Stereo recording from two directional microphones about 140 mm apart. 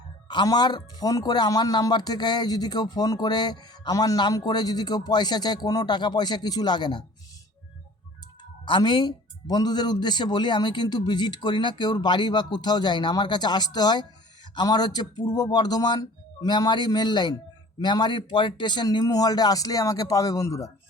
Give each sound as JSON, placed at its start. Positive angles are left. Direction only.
{"t": 0.3, "sound": "speech", "side_deg": 30}
{"t": 8.6, "sound": "speech", "side_deg": 35}